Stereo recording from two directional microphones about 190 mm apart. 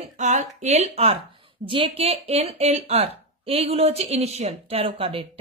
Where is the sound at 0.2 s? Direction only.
40° right (ahead or behind).